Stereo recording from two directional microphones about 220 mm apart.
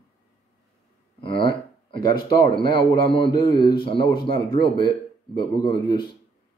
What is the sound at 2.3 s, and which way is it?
A man's voice, 20° left (ahead or behind).